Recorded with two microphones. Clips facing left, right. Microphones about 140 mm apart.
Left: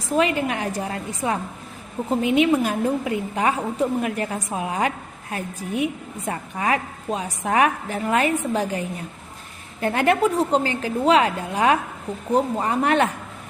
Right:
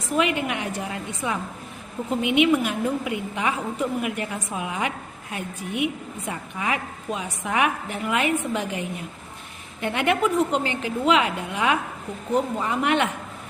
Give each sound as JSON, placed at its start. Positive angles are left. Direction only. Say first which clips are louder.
{"t": 0.2, "sound": "a woman's voice", "louder": "left 2 dB", "side_deg": 35}
{"t": 9.8, "sound": "a woman's voice", "louder": "left 3 dB", "side_deg": 40}